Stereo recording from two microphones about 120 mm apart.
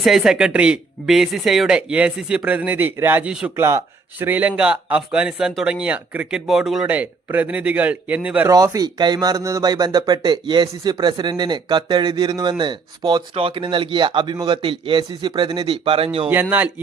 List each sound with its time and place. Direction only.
0.0 s speech: centre (ahead or behind)
3.5 s speech: 20° right (ahead or behind); by 6.8 s centre (ahead or behind)
6.8 s speech: 15° right (ahead or behind)
8.4 s a man's voice: 25° right (ahead or behind); by 16.3 s 50° right (ahead or behind)
16.3 s speech: 15° right (ahead or behind)